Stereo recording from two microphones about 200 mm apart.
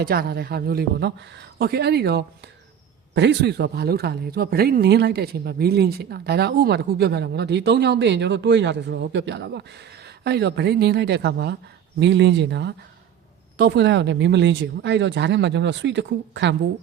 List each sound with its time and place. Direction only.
0.0 s speech: 45° right (ahead or behind)